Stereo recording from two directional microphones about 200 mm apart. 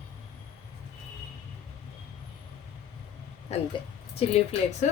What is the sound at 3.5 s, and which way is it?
Speech, 30° left (ahead or behind).